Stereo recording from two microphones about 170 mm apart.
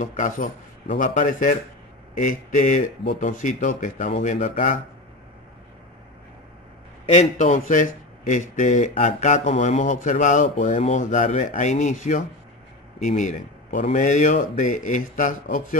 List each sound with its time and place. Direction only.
0.2 s speech: 50° left (ahead or behind)
7.1 s speech: 45° left (ahead or behind)